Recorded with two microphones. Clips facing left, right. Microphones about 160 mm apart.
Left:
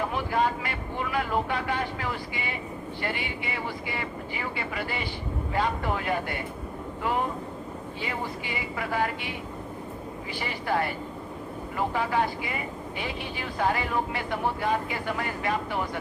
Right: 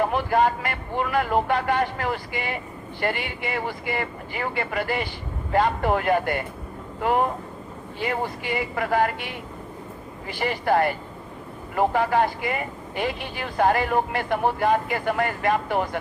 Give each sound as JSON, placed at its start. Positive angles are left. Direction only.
{"t": 0.0, "sound": "speech", "side_deg": -55}